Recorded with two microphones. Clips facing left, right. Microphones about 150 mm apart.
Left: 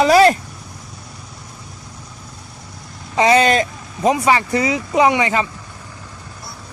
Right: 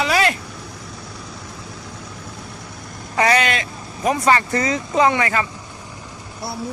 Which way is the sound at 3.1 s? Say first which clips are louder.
Left 4 dB; 20° left (ahead or behind).